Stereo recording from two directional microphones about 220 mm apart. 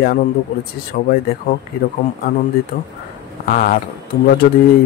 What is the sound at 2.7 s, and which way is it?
Speech, 45° left (ahead or behind).